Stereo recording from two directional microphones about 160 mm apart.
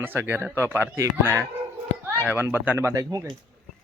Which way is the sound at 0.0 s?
15° right (ahead or behind).